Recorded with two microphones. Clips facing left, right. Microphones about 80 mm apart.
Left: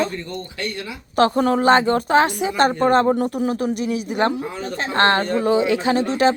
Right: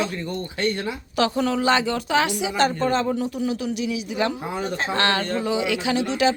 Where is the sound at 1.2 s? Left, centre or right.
Left.